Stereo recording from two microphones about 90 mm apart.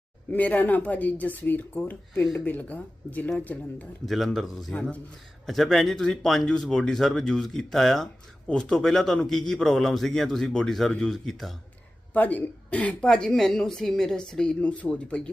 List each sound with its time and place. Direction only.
0.3 s speech: 15° left (ahead or behind)
4.0 s speech: centre (ahead or behind)
4.7 s a woman's voice: 15° left (ahead or behind)
5.5 s speech: centre (ahead or behind)
12.1 s a woman's voice: 20° left (ahead or behind)